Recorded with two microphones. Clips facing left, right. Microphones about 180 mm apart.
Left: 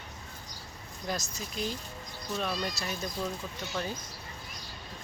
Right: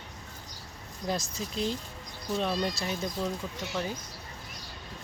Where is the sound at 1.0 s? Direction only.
30° right (ahead or behind).